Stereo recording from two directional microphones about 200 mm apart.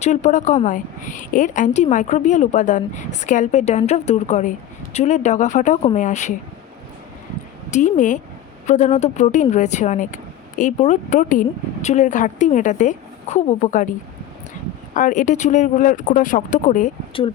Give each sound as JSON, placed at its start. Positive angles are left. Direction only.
{"t": 0.0, "sound": "speech", "side_deg": 35}
{"t": 7.7, "sound": "speech", "side_deg": 40}
{"t": 14.9, "sound": "speech", "side_deg": 40}